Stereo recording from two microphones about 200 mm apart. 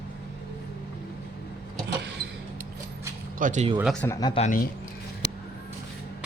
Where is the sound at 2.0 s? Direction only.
55° right (ahead or behind).